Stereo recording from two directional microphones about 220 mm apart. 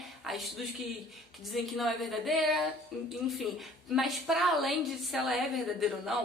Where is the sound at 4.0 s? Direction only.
Centre (ahead or behind).